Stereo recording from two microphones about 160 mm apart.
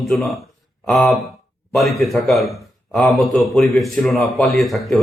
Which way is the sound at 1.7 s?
Centre (ahead or behind).